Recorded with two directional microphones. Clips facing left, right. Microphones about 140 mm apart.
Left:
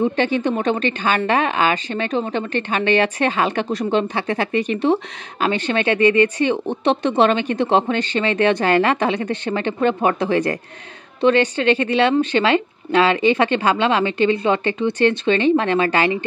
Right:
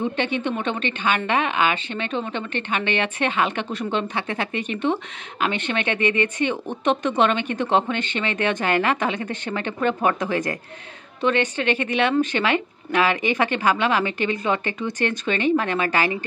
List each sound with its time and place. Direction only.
0.2 s a woman's voice: 40° left (ahead or behind)